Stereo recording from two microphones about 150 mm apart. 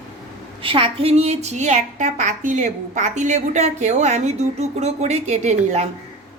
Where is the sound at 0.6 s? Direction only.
35° right (ahead or behind).